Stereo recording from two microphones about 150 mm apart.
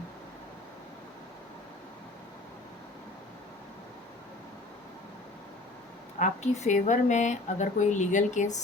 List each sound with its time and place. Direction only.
6.1 s speech: 50° left (ahead or behind)